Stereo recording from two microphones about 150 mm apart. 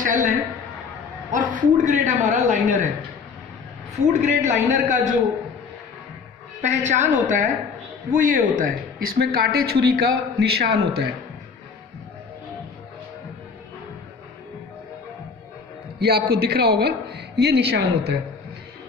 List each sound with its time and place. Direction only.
0.0 s a man's voice: 60° right (ahead or behind)
4.1 s a man's voice: 55° right (ahead or behind)
6.6 s a man's voice: 50° right (ahead or behind); by 11.1 s 90° right
16.0 s speech: 90° right